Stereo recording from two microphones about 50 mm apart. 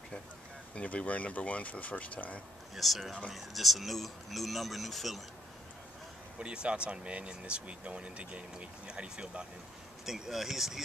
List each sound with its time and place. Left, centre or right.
0.7 s speech: left
2.7 s speech: centre
6.4 s speech: right
10.0 s speech: centre